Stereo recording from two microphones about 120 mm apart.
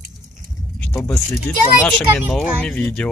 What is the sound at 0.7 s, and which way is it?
Keys jangling, 15° left (ahead or behind).